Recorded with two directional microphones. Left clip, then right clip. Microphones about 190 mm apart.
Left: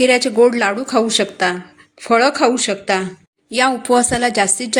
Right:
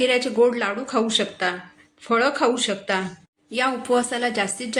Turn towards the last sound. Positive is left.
turn(degrees=40)  # may be behind; listen again after turning